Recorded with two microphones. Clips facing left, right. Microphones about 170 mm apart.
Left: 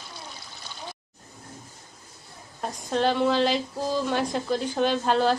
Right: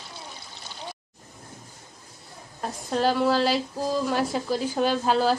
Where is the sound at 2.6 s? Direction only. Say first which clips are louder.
Even; 5° right (ahead or behind).